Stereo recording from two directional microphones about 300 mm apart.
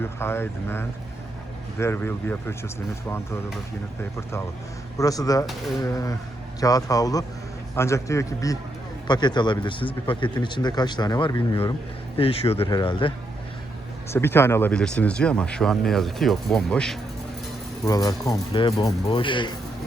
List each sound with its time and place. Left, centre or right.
0.0 s speech: centre
4.9 s speech: centre